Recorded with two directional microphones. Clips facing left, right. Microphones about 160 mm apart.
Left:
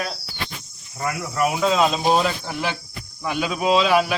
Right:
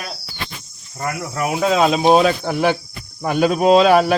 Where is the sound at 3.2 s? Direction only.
45° right (ahead or behind).